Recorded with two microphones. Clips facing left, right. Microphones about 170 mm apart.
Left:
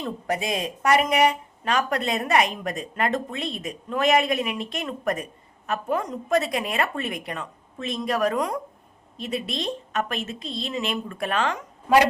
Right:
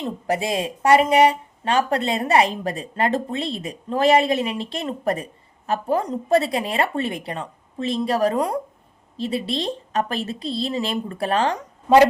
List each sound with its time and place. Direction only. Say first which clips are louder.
0.0 s speech: right 3 dB; 30° right (ahead or behind)